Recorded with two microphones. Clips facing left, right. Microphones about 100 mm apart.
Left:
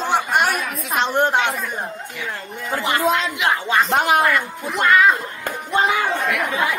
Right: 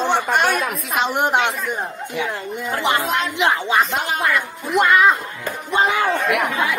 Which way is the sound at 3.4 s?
25° right (ahead or behind).